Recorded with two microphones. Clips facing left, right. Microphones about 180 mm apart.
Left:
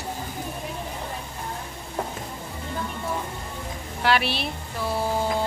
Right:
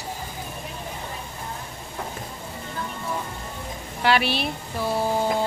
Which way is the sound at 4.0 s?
Centre (ahead or behind).